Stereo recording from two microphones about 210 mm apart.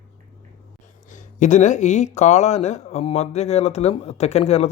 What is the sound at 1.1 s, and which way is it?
Speech, 35° left (ahead or behind).